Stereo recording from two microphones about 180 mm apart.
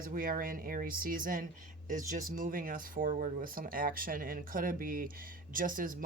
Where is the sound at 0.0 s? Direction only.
50° right (ahead or behind).